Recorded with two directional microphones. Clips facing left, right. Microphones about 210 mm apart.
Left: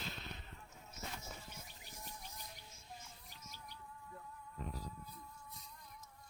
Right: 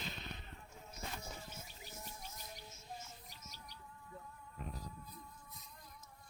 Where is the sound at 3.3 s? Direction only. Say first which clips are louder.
Left 1 dB; 50° left (ahead or behind).